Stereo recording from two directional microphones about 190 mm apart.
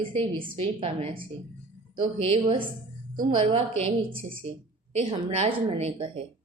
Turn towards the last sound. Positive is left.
turn(degrees=-30)  # may be behind; listen again after turning